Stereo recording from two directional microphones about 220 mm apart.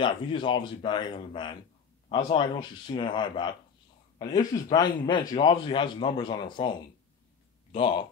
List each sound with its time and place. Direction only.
0.0 s a man's voice: 20° left (ahead or behind)